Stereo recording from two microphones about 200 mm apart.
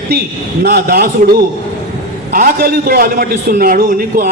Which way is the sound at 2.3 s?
45° right (ahead or behind).